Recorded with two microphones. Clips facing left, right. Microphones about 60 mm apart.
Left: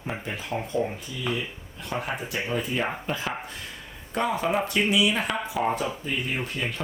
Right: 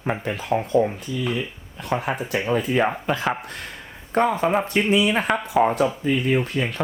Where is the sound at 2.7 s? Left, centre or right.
Right.